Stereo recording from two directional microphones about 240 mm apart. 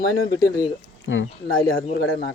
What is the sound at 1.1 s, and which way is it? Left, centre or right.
Speech, left.